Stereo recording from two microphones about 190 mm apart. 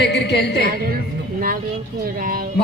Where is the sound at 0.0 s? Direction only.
65° left (ahead or behind).